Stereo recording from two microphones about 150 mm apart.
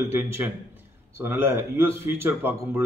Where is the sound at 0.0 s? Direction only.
15° right (ahead or behind).